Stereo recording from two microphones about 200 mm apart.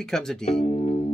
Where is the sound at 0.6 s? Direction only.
30° left (ahead or behind).